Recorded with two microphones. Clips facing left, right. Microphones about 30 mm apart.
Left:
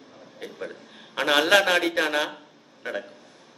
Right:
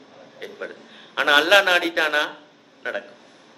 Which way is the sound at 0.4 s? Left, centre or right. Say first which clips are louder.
Right 2 dB; centre.